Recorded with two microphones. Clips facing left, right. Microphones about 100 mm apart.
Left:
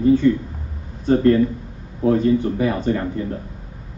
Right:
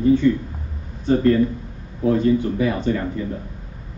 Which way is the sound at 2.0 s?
35° left (ahead or behind).